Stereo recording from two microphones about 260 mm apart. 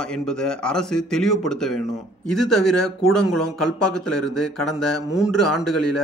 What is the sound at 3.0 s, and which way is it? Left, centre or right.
Speech, left.